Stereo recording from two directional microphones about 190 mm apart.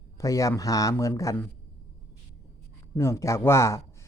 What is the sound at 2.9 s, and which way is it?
Speech, 15° left (ahead or behind).